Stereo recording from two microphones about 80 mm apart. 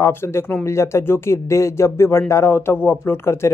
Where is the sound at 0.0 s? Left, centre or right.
Left.